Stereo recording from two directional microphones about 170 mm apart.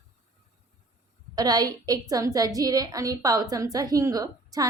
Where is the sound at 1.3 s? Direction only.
25° right (ahead or behind).